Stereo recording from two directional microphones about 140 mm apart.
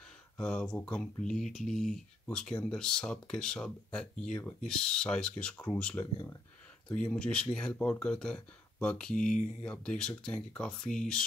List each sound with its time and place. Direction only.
0.4 s speech: 5° left (ahead or behind)
9.1 s speech: 65° left (ahead or behind)
9.7 s speech: 5° left (ahead or behind)